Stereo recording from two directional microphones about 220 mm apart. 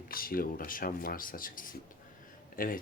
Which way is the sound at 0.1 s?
40° left (ahead or behind).